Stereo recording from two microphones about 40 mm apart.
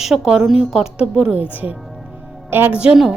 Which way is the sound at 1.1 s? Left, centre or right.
Right.